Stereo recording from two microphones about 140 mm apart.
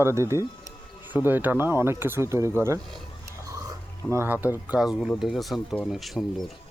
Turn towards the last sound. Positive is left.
turn(degrees=0)  # may be behind; listen again after turning